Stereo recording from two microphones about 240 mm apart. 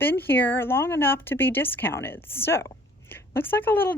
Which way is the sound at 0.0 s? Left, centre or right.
Centre.